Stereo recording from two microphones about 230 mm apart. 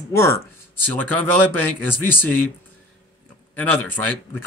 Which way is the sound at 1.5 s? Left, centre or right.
Right.